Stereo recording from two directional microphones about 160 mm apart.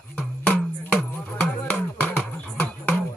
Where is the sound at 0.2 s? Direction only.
5° left (ahead or behind).